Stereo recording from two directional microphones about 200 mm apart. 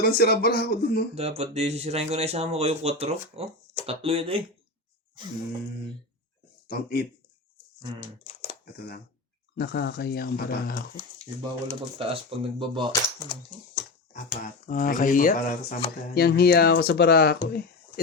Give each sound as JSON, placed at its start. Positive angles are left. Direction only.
{"t": 0.0, "sound": "speech", "side_deg": 50}
{"t": 1.1, "sound": "speech", "side_deg": -30}
{"t": 6.7, "sound": "speech", "side_deg": 50}
{"t": 9.6, "sound": "speech", "side_deg": 55}
{"t": 11.9, "sound": "speech", "side_deg": -30}
{"t": 14.4, "sound": "speech", "side_deg": 40}